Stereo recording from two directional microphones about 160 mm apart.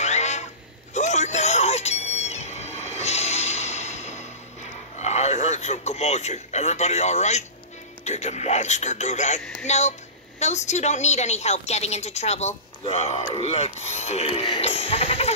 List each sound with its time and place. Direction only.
0.0 s a sound: 45° left (ahead or behind)
0.9 s music: 45° left (ahead or behind)
4.9 s a man's voice: 45° left (ahead or behind)
13.7 s sheep: 45° left (ahead or behind)